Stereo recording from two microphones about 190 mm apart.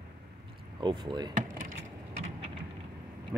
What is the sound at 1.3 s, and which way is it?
Vehicle, 45° right (ahead or behind).